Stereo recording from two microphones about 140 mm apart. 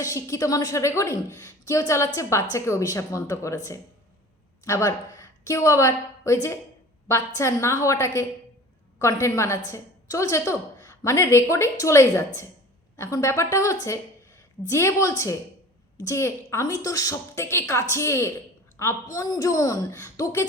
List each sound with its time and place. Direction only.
0.0 s a woman's voice: 25° left (ahead or behind)